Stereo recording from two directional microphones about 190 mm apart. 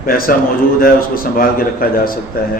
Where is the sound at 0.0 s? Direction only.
50° left (ahead or behind).